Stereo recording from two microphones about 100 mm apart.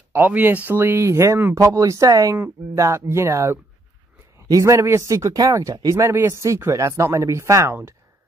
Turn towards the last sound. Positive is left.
turn(degrees=-30)  # may be behind; listen again after turning